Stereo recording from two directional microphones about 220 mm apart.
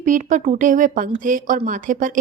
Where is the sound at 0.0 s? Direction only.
35° right (ahead or behind).